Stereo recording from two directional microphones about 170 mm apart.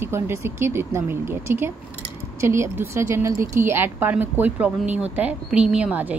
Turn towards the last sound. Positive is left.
turn(degrees=-10)  # may be behind; listen again after turning